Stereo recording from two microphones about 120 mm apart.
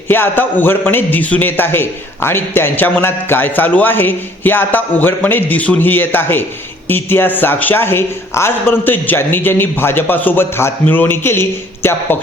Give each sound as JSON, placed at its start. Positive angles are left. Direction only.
{"t": 0.1, "sound": "a man's voice", "side_deg": 15}